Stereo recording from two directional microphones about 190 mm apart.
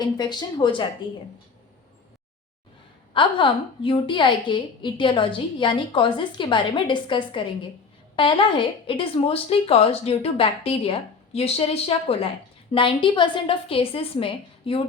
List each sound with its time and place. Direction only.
0.0 s a woman's voice: 20° left (ahead or behind)
3.1 s a woman's voice: 25° left (ahead or behind)